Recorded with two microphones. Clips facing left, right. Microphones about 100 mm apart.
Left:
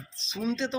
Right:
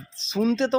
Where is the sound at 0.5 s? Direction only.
45° right (ahead or behind).